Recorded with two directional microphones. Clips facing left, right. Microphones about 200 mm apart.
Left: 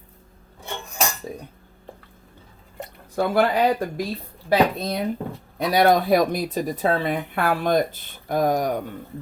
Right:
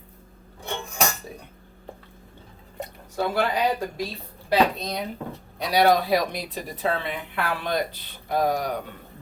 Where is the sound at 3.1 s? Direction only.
50° left (ahead or behind).